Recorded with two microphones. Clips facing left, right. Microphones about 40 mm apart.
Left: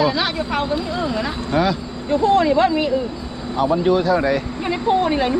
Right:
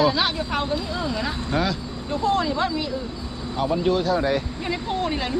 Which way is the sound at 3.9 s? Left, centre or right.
Centre.